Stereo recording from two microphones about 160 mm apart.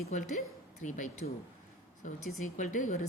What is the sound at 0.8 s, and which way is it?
A woman's voice, 50° left (ahead or behind).